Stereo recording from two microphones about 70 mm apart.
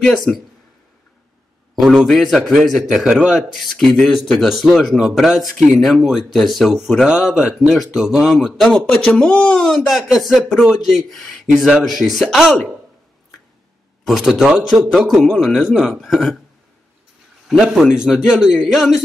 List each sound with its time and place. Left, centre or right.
0.0 s speech: centre
1.8 s speech: centre
9.1 s speech: centre
14.0 s speech: centre
17.5 s speech: centre